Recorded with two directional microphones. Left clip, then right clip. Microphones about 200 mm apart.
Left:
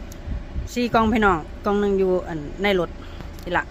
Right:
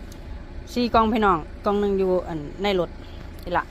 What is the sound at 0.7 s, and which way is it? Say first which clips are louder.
A man's voice: even; centre (ahead or behind).